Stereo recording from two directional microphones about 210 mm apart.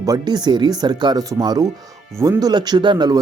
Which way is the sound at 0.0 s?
20° right (ahead or behind).